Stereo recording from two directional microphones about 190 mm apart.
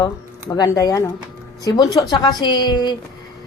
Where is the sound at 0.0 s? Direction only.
20° left (ahead or behind).